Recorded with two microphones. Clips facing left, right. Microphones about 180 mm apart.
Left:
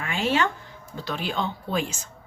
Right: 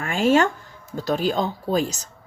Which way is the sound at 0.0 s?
45° right (ahead or behind).